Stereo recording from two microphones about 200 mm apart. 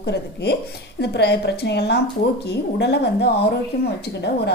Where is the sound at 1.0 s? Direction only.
55° left (ahead or behind).